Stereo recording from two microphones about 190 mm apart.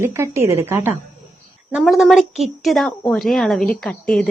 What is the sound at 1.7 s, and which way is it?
Speech, centre (ahead or behind).